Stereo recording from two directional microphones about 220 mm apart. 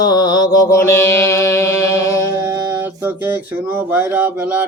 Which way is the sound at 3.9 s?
10° right (ahead or behind).